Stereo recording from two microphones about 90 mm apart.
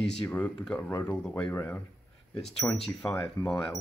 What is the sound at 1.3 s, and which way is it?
Speech, 25° left (ahead or behind).